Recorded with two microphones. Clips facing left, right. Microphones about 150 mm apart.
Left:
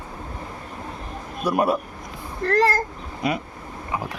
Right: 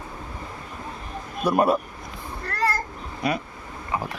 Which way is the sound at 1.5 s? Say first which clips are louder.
Right 1 dB; 10° left (ahead or behind).